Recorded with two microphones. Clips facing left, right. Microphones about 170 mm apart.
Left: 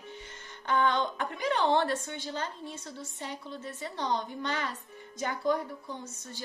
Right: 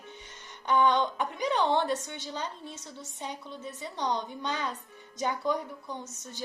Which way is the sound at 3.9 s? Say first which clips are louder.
Even; 15° right (ahead or behind).